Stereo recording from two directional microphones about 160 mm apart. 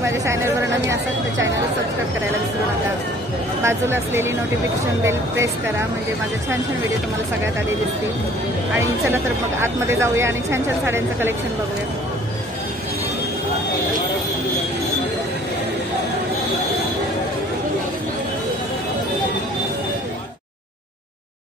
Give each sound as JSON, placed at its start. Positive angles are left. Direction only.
{"t": 0.0, "sound": "a sound", "side_deg": -15}
{"t": 3.6, "sound": "speech", "side_deg": -15}
{"t": 8.7, "sound": "speech", "side_deg": -15}